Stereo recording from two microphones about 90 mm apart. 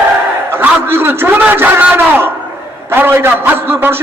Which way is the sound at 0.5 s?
25° right (ahead or behind).